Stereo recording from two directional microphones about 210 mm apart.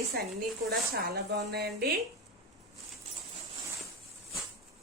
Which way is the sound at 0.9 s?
50° right (ahead or behind).